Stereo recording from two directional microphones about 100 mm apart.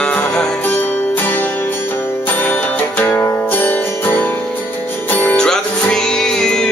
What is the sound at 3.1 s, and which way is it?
Music, 20° left (ahead or behind).